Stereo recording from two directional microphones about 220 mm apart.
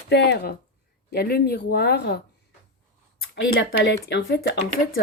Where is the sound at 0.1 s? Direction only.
50° left (ahead or behind).